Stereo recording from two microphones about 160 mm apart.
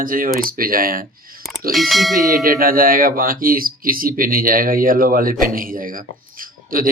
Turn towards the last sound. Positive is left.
turn(degrees=-60)  # may be behind; listen again after turning